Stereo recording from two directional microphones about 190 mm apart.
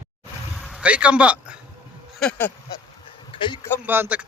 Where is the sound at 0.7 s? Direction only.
5° right (ahead or behind).